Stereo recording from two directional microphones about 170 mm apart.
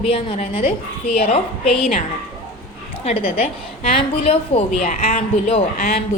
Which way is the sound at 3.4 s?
40° left (ahead or behind).